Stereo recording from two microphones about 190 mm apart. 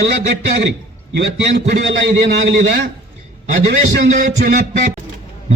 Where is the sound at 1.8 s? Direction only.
65° right (ahead or behind).